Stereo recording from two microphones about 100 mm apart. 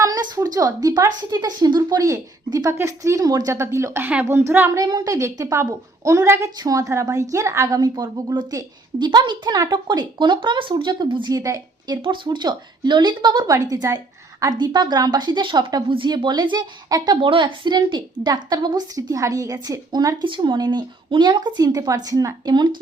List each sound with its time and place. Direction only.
0.0 s speech: 35° right (ahead or behind)
4.0 s a woman's voice: 15° right (ahead or behind)
4.8 s speech: 40° right (ahead or behind)
7.8 s a woman's voice: 45° right (ahead or behind)
12.0 s a woman's voice: 55° right (ahead or behind)
13.5 s a woman's voice: 35° right (ahead or behind)
20.2 s a woman's voice: 55° right (ahead or behind); by 22.5 s 35° right (ahead or behind)